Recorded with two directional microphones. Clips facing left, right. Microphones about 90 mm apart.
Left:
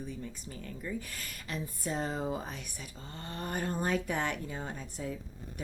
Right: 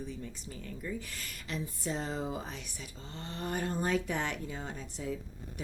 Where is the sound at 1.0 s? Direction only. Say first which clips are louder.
Left 1 dB; 45° left (ahead or behind).